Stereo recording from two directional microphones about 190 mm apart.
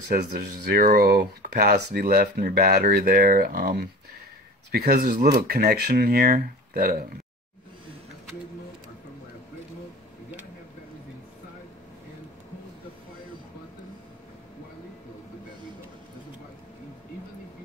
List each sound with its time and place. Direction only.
0.7 s speech: 50° right (ahead or behind)